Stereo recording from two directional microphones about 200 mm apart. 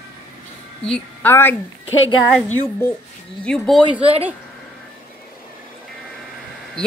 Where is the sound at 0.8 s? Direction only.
5° left (ahead or behind).